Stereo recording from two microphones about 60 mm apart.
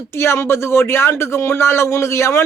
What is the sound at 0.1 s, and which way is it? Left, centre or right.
A man's voice, left.